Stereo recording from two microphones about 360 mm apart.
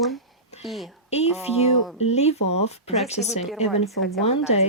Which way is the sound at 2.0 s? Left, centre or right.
Centre.